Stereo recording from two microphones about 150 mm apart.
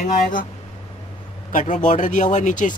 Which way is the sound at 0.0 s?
60° left (ahead or behind).